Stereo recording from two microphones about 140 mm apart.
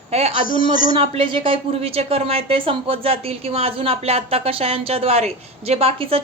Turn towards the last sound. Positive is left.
turn(degrees=-45)  # may be behind; listen again after turning